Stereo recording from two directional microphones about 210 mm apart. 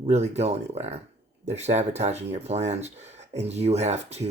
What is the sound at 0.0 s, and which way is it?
Speech, 30° right (ahead or behind).